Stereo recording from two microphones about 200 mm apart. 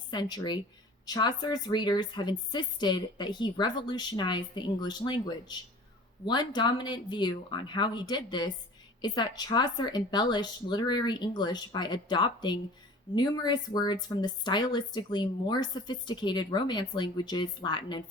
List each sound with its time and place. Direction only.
0.1 s a woman's voice: 20° left (ahead or behind)